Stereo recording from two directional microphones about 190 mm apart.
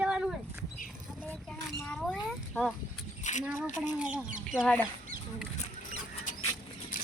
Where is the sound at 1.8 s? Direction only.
5° left (ahead or behind).